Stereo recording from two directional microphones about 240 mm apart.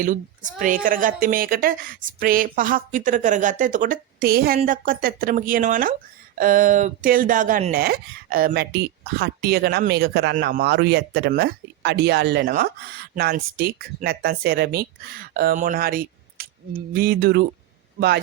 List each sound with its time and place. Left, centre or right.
0.0 s speech: right